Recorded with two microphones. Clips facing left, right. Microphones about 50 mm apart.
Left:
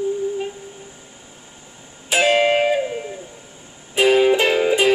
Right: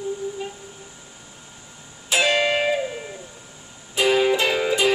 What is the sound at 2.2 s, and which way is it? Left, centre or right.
Music, left.